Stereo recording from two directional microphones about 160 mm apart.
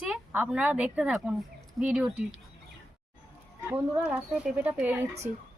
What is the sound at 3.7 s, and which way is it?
A woman's voice, 10° right (ahead or behind).